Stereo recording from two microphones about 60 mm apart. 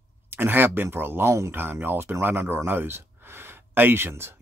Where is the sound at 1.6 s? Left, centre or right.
Right.